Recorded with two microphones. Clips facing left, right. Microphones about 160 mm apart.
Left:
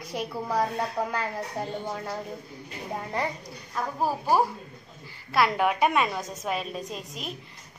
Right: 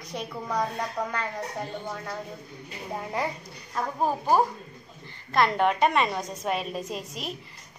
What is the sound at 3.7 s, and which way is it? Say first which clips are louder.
A woman's voice: right 1 dB; 5° left (ahead or behind).